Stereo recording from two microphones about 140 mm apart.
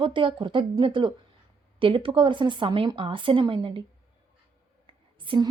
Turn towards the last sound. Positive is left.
turn(degrees=-35)  # may be behind; listen again after turning